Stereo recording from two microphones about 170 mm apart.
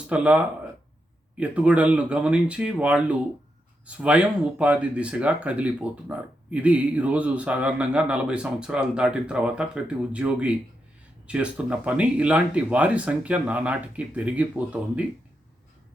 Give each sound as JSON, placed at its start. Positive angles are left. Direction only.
{"t": 0.1, "sound": "speech", "side_deg": -5}